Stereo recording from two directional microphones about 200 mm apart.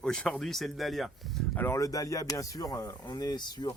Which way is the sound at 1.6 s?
15° left (ahead or behind).